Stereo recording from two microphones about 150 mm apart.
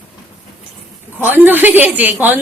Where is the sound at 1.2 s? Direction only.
10° right (ahead or behind).